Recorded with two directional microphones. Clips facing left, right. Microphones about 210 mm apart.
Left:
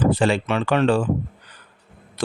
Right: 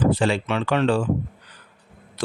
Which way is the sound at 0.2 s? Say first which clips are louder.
Left 2 dB; 55° left (ahead or behind).